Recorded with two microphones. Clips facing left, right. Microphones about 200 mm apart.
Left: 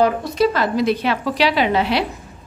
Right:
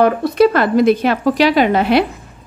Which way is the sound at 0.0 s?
60° right (ahead or behind).